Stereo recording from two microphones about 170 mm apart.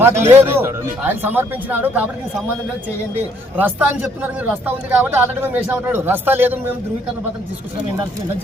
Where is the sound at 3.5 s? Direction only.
10° right (ahead or behind).